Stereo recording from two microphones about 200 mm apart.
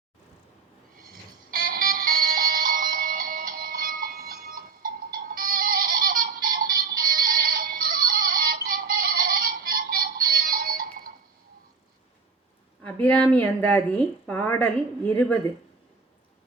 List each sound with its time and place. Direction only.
0.9 s music: 45° right (ahead or behind)
12.8 s a woman's voice: 10° left (ahead or behind)